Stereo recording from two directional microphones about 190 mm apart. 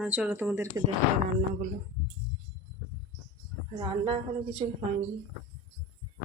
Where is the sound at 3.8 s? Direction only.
25° right (ahead or behind).